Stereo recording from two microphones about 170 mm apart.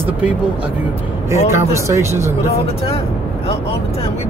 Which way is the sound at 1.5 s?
15° right (ahead or behind).